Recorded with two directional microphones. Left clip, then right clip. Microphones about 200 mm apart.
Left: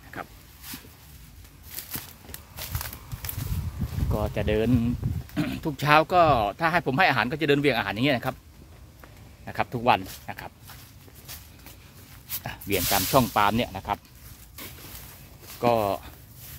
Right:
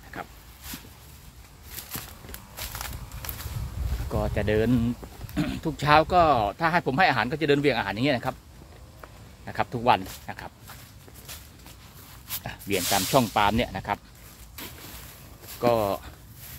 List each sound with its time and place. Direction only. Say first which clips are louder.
4.1 s speech: right 1 dB; 10° left (ahead or behind)
9.5 s speech: even; 10° left (ahead or behind)
12.4 s speech: even; 15° left (ahead or behind)
15.6 s speech: even; 15° left (ahead or behind)